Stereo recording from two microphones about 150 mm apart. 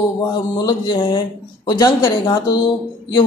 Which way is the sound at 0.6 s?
30° left (ahead or behind).